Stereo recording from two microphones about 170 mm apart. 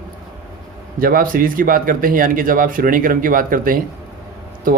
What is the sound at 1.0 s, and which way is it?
Speech, 60° right (ahead or behind).